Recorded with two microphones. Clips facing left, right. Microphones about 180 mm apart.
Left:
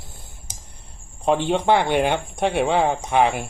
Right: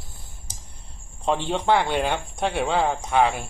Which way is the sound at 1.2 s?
20° left (ahead or behind).